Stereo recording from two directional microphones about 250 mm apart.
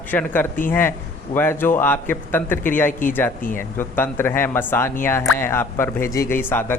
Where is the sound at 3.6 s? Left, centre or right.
Centre.